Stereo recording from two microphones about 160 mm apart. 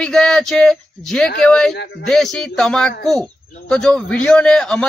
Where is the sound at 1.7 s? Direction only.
90° left.